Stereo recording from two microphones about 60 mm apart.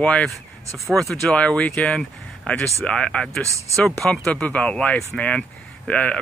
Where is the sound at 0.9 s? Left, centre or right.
Centre.